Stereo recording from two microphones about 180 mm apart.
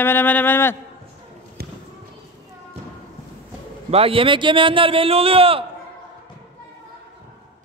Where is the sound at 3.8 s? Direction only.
30° right (ahead or behind).